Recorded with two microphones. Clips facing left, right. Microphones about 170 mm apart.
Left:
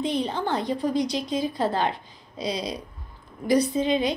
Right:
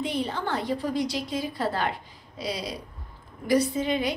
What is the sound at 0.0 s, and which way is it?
A woman's voice, 20° left (ahead or behind).